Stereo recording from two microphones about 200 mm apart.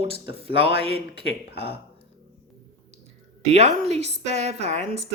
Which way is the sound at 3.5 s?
35° right (ahead or behind).